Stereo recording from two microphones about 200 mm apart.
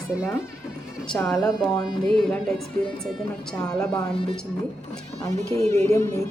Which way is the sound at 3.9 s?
25° left (ahead or behind).